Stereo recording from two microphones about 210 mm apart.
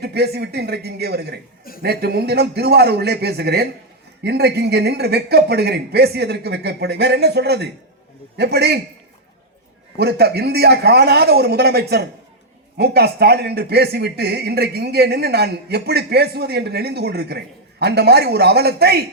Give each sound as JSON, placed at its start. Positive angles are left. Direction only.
{"t": 0.0, "sound": "speech", "side_deg": -50}
{"t": 10.0, "sound": "speech", "side_deg": -50}